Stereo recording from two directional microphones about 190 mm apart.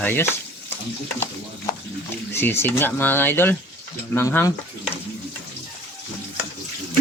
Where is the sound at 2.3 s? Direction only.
10° left (ahead or behind).